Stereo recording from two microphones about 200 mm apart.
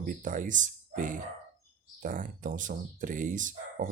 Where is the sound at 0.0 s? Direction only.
40° right (ahead or behind).